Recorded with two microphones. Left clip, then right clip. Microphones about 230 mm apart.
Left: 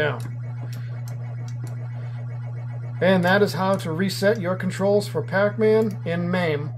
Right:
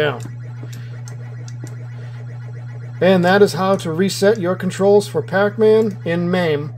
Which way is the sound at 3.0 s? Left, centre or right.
Right.